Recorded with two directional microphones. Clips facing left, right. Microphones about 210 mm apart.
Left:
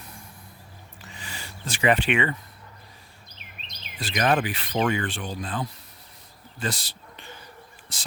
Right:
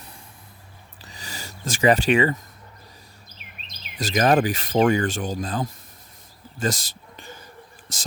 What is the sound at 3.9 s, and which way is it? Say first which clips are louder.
Speech: right 5 dB; 40° right (ahead or behind).